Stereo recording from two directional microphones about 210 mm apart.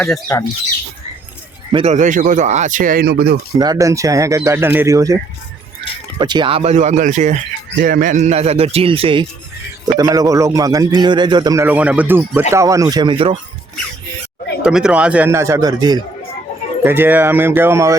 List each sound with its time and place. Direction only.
0.0 s speech: 10° left (ahead or behind)
1.7 s speech: 30° right (ahead or behind); by 3.3 s 45° right (ahead or behind)
3.5 s a man's voice: 20° right (ahead or behind)
14.6 s a man's voice: 5° right (ahead or behind)